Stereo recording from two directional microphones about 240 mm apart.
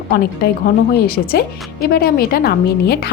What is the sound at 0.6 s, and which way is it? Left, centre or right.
A woman's voice, left.